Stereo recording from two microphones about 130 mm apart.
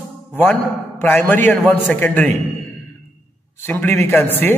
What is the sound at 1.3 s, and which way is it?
A man's voice, 15° left (ahead or behind).